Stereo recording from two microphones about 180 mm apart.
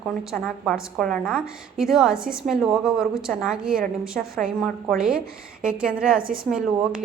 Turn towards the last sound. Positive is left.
turn(degrees=-5)  # may be behind; listen again after turning